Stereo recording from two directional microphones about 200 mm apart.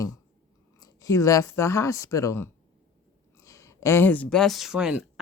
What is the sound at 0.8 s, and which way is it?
Speech, 20° left (ahead or behind).